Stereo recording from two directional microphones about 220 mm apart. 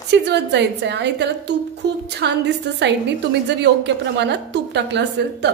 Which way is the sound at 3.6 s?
50° right (ahead or behind).